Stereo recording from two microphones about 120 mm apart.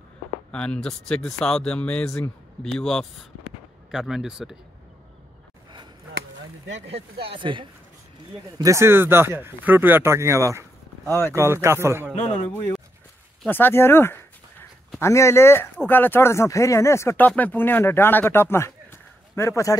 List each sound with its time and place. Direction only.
0.5 s speech: 10° left (ahead or behind)
7.2 s speech: 45° right (ahead or behind)
8.5 s speech: 25° right (ahead or behind)
11.1 s speech: 20° left (ahead or behind)
11.3 s speech: 20° right (ahead or behind)
12.4 s speech: 15° left (ahead or behind)